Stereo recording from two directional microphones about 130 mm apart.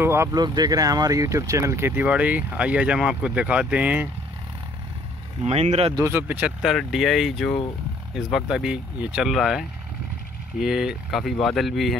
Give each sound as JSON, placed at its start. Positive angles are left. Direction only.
{"t": 0.0, "sound": "speech", "side_deg": -20}
{"t": 0.3, "sound": "speech", "side_deg": -30}
{"t": 5.4, "sound": "speech", "side_deg": -55}
{"t": 5.9, "sound": "speech", "side_deg": -20}
{"t": 6.6, "sound": "speech", "side_deg": 0}